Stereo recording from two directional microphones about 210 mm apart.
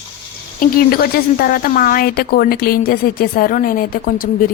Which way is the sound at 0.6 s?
45° left (ahead or behind).